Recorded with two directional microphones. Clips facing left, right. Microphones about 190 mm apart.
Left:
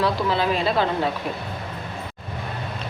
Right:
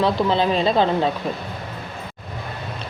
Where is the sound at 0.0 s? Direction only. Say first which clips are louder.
Right 3 dB; 25° right (ahead or behind).